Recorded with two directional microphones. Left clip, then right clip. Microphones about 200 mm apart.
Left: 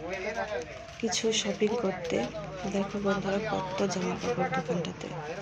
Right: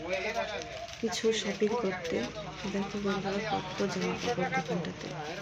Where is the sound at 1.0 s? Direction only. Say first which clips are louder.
Left 1 dB; 10° left (ahead or behind).